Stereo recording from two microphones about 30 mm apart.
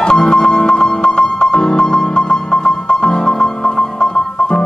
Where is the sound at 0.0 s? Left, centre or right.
Left.